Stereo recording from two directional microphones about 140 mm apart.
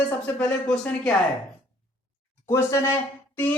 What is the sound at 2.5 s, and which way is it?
Speech, 20° left (ahead or behind).